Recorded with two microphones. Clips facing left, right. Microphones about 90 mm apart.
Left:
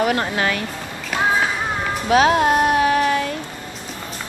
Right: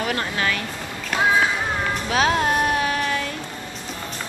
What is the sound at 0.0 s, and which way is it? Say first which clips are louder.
Speech: left 5 dB; 25° left (ahead or behind).